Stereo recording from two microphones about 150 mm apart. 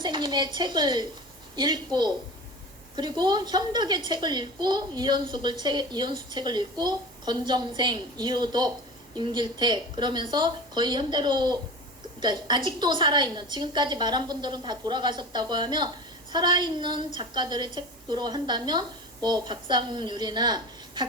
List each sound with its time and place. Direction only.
0.0 s a woman's voice: 30° right (ahead or behind)